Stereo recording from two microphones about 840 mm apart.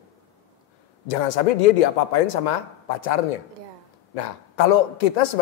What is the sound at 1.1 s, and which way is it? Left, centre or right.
A man's voice, left.